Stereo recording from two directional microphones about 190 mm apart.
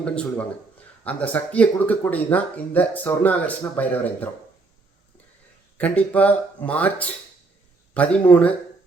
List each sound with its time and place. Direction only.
0.0 s speech: 5° left (ahead or behind)
5.7 s speech: 10° left (ahead or behind)